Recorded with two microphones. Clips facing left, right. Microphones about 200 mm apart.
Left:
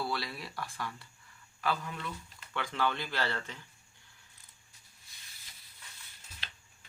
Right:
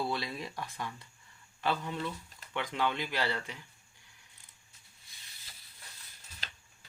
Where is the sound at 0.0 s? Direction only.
20° right (ahead or behind).